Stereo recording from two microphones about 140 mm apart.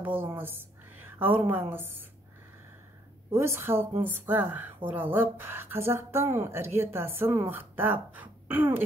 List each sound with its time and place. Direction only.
0.0 s a woman's voice: 15° right (ahead or behind)
3.3 s speech: 15° right (ahead or behind)